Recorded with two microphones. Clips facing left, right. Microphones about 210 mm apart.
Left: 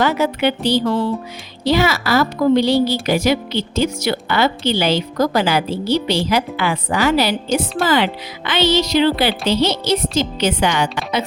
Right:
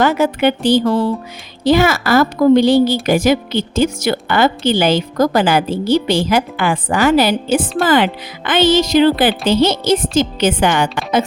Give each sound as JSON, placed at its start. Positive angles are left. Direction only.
{"t": 0.0, "sound": "a woman's voice", "side_deg": -50}